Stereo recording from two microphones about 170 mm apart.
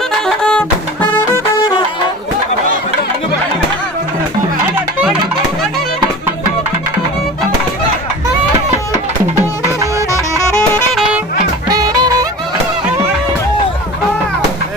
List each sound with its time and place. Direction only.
0.3 s music: 5° left (ahead or behind)
11.7 s music: 20° right (ahead or behind)